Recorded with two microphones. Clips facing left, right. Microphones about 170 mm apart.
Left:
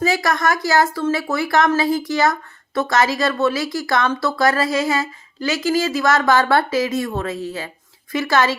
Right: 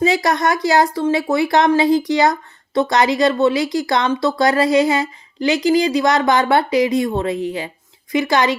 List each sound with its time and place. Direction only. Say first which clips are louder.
0.0 s speech: right 3 dB; 20° right (ahead or behind)